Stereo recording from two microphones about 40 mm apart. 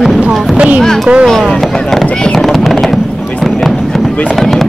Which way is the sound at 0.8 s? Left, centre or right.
Centre.